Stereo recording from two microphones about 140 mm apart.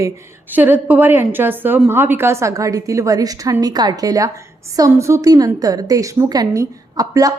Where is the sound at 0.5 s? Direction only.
15° right (ahead or behind).